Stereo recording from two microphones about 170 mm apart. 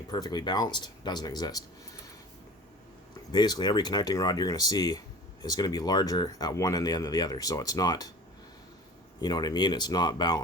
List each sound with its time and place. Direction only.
0.1 s speech: 25° left (ahead or behind)
3.3 s speech: 25° left (ahead or behind)
9.2 s speech: 25° left (ahead or behind)